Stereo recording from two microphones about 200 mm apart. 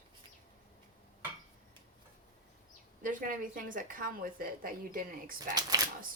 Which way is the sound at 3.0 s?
45° right (ahead or behind).